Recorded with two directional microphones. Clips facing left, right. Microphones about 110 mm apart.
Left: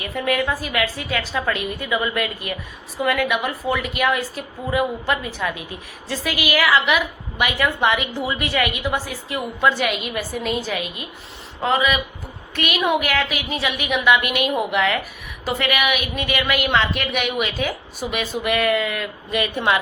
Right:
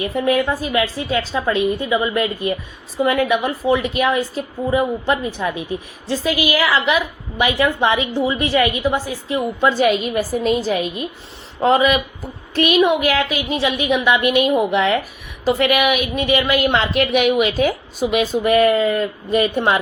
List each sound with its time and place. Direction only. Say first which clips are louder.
0.0 s a woman's voice: right 5 dB; 30° right (ahead or behind)